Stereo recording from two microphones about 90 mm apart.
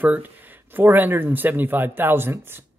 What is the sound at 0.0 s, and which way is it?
Speech, 20° right (ahead or behind).